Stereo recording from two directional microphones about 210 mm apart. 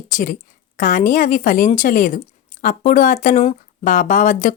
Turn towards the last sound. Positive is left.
turn(degrees=40)  # may be behind; listen again after turning